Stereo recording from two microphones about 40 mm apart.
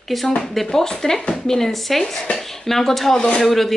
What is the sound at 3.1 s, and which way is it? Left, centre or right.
Speech, centre.